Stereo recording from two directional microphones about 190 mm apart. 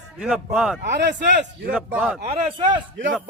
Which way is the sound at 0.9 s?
65° right (ahead or behind).